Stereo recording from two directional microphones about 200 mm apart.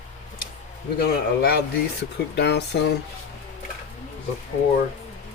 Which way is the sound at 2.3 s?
55° left (ahead or behind).